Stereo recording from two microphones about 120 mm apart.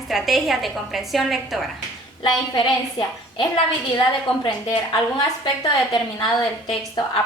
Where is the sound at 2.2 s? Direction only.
40° left (ahead or behind).